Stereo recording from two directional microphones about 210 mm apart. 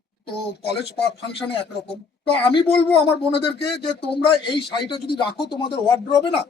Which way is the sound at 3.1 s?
55° left (ahead or behind).